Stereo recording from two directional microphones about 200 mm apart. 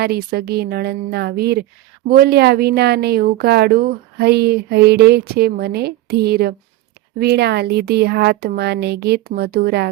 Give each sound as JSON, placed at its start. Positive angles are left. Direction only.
{"t": 0.0, "sound": "a woman's voice", "side_deg": -50}